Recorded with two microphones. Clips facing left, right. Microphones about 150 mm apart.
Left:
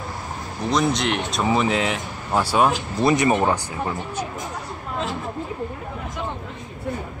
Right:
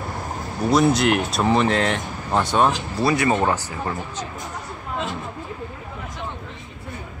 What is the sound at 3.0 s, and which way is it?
Speech, 20° left (ahead or behind).